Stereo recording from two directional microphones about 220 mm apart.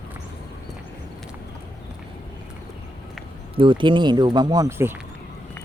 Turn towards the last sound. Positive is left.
turn(degrees=-15)  # may be behind; listen again after turning